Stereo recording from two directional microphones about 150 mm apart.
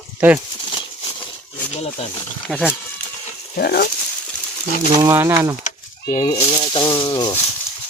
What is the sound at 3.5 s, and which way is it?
Speech, 90° left.